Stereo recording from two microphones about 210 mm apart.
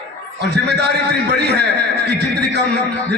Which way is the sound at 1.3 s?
55° right (ahead or behind).